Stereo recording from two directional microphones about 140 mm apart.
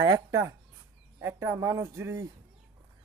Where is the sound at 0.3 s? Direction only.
20° right (ahead or behind).